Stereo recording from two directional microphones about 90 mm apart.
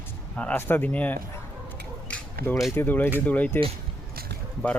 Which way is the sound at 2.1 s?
15° left (ahead or behind).